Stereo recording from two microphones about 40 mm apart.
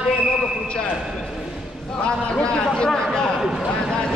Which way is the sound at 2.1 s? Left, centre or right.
Left.